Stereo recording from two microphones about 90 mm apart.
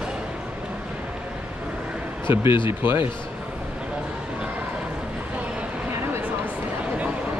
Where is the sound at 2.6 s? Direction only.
25° right (ahead or behind).